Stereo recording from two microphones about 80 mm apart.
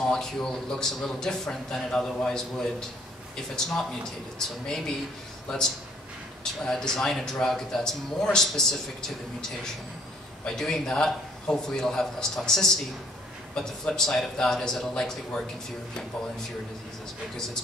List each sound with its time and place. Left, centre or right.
0.0 s a man's voice: centre
3.5 s a man's voice: centre
6.6 s a man's voice: centre
10.4 s a man's voice: centre